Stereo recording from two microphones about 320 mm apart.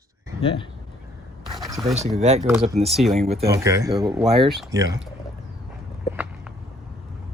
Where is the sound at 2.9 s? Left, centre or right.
Centre.